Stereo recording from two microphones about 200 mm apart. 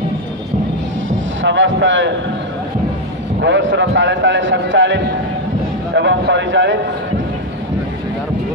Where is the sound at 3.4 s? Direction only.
65° right (ahead or behind).